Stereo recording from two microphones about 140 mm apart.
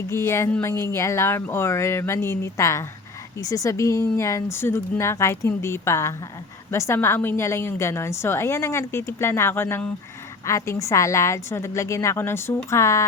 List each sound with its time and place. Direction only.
0.1 s a woman's voice: 20° left (ahead or behind)